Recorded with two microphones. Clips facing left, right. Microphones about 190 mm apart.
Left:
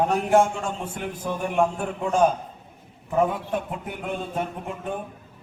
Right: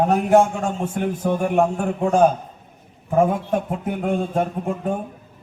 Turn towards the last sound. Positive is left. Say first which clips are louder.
# right 7 dB
turn(degrees=-45)  # may be behind; listen again after turning